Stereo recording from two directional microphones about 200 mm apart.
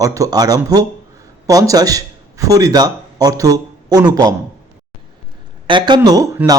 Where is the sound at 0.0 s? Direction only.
15° right (ahead or behind).